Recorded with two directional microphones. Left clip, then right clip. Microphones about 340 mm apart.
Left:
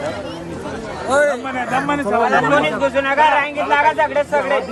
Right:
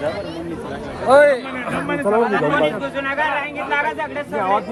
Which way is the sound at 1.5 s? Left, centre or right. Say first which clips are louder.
Left 4 dB; centre.